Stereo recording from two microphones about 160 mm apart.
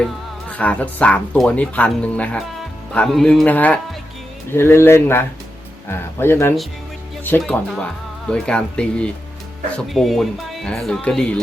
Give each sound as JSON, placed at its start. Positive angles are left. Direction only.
{"t": 0.5, "sound": "speech", "side_deg": 10}